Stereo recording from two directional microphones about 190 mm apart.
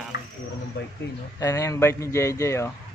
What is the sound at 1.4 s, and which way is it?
A man's voice, 15° left (ahead or behind).